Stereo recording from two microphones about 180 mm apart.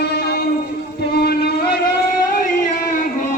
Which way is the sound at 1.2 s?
60° left (ahead or behind).